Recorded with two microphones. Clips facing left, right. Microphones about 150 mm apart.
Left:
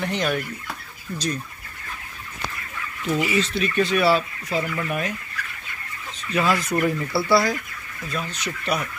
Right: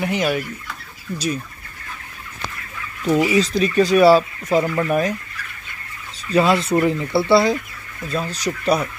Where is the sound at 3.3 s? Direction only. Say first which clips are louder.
Right 5 dB; 40° right (ahead or behind).